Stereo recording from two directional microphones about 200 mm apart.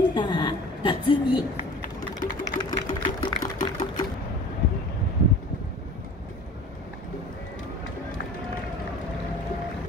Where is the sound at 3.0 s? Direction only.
40° left (ahead or behind).